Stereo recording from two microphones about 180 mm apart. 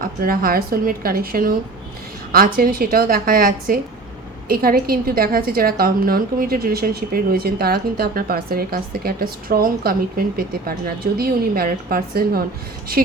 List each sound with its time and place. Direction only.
0.0 s a woman's voice: 55° right (ahead or behind)